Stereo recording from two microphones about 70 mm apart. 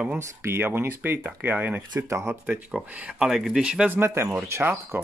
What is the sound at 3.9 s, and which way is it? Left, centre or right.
Speech, right.